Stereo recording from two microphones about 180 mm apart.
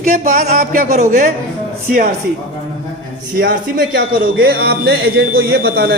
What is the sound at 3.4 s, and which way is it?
Speech, 60° right (ahead or behind).